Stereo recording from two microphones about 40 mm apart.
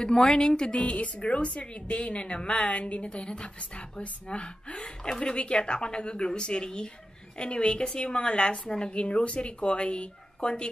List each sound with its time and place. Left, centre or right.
0.0 s a woman's voice: left